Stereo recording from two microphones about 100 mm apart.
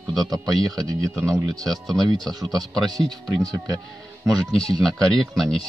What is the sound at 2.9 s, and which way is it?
Speech, 40° right (ahead or behind).